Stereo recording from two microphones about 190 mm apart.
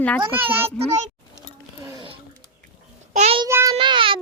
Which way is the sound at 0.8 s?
35° right (ahead or behind).